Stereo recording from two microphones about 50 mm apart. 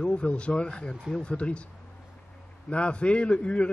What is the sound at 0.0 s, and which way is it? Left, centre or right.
Speech, left.